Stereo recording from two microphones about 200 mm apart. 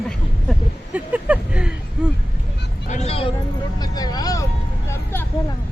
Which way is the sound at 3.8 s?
20° left (ahead or behind).